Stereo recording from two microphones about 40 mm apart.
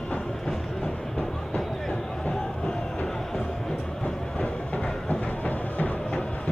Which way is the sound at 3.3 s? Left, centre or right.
Centre.